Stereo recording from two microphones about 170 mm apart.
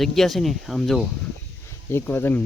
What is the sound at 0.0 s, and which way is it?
Speech, centre (ahead or behind).